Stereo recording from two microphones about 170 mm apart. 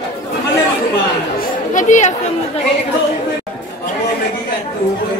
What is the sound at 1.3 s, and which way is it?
Chatter, 50° left (ahead or behind).